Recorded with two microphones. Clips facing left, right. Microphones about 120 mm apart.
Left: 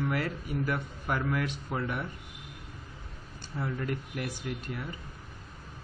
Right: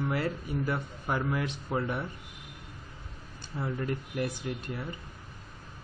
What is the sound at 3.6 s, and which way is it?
A man's voice, 25° right (ahead or behind).